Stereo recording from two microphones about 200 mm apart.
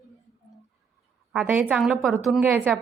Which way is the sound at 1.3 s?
5° right (ahead or behind).